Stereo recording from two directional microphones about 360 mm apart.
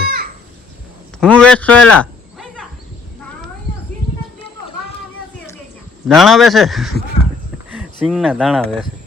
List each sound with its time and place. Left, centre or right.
0.0 s children playing: right
1.2 s a sound: centre
6.1 s speech: centre
8.0 s speech: centre